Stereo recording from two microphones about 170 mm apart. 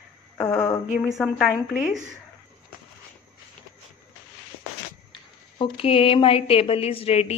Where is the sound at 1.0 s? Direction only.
Centre (ahead or behind).